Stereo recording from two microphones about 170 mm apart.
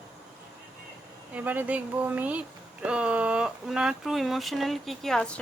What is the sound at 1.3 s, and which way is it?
Speech, 10° right (ahead or behind).